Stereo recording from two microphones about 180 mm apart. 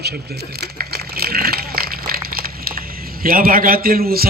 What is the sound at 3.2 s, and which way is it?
A man's voice, 55° right (ahead or behind).